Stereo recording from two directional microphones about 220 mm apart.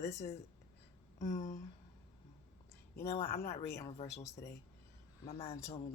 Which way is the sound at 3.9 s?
25° left (ahead or behind).